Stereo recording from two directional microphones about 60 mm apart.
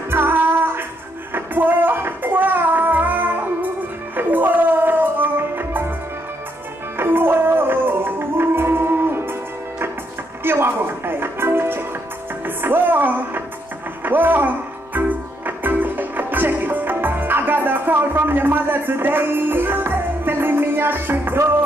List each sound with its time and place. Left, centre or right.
0.1 s music: right
7.0 s music: right
14.0 s a sound: right
15.0 s music: right